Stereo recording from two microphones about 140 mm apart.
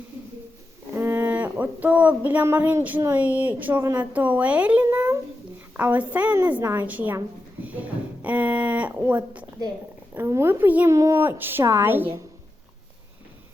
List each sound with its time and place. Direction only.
0.9 s a woman's voice: 15° right (ahead or behind)